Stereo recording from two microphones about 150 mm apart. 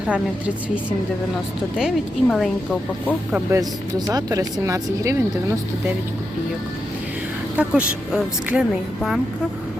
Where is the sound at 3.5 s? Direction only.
25° right (ahead or behind).